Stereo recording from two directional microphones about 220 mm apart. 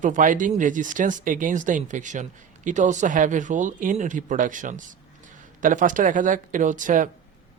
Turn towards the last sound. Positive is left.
turn(degrees=-35)  # may be behind; listen again after turning